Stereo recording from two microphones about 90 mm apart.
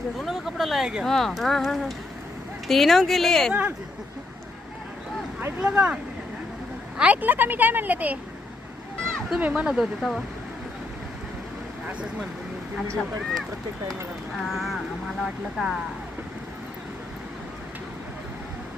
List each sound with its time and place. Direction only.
0.2 s speech: centre (ahead or behind)
5.5 s a woman's voice: 15° right (ahead or behind)
9.4 s speech: 15° right (ahead or behind)
14.4 s speech: centre (ahead or behind)